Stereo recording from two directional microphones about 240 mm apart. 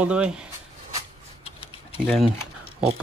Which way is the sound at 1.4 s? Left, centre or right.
Left.